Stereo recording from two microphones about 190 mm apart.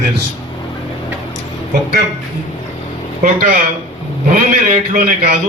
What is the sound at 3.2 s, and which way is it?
A man's voice, 40° right (ahead or behind).